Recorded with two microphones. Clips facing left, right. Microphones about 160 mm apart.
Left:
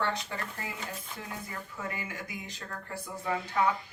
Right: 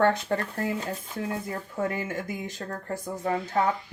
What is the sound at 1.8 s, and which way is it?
Speech, 50° right (ahead or behind).